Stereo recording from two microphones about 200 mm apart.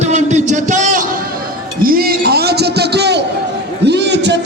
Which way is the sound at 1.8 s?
45° right (ahead or behind).